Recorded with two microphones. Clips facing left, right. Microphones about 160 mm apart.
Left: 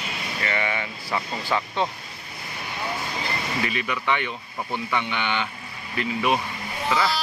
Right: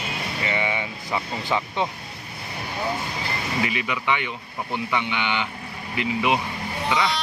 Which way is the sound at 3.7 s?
15° right (ahead or behind).